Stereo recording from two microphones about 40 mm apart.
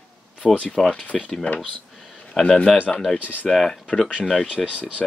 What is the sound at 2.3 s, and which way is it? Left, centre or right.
Speech, left.